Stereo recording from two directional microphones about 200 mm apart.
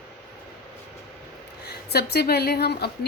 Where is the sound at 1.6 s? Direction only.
55° left (ahead or behind).